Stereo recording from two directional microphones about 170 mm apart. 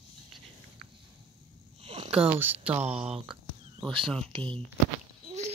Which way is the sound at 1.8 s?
35° right (ahead or behind).